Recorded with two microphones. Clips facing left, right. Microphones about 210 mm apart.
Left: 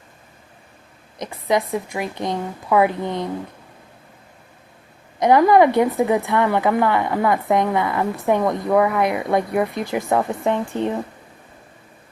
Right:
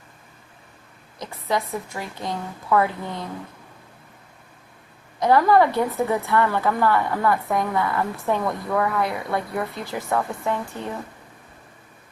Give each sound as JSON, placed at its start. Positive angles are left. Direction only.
{"t": 1.2, "sound": "a woman's voice", "side_deg": 20}
{"t": 5.2, "sound": "a woman's voice", "side_deg": 15}